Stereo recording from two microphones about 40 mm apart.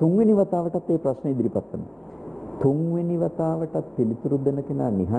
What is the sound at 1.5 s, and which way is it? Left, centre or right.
A man's voice, centre.